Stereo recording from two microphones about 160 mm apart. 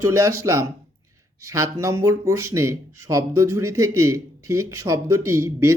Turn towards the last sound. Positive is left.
turn(degrees=-20)  # may be behind; listen again after turning